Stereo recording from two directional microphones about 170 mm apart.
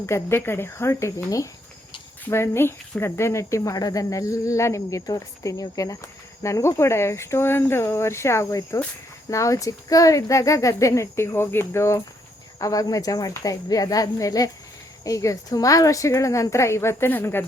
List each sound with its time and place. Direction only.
0.0 s a child's voice: 15° left (ahead or behind)